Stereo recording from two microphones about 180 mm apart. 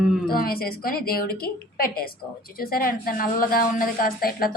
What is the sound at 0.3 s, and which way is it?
A woman's voice, 55° left (ahead or behind).